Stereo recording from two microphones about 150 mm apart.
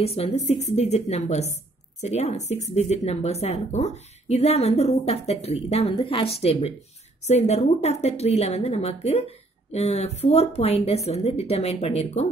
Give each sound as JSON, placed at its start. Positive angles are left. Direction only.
{"t": 0.0, "sound": "speech", "side_deg": 40}